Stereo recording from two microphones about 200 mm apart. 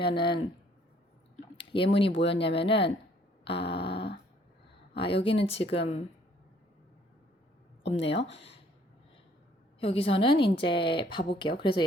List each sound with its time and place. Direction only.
0.0 s a woman's voice: 25° left (ahead or behind)
1.5 s a woman's voice: 25° left (ahead or behind)
3.4 s dog: 25° left (ahead or behind)
4.9 s a woman's voice: 25° left (ahead or behind)
7.9 s a woman's voice: 30° left (ahead or behind)
9.8 s a woman's voice: 30° left (ahead or behind)